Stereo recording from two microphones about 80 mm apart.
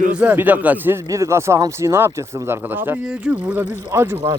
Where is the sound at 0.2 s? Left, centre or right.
Right.